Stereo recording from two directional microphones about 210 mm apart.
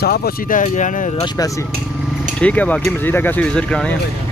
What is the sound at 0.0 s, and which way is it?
Speech, 45° left (ahead or behind).